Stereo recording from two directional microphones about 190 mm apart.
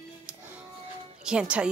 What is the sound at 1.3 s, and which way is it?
Speech, 5° right (ahead or behind).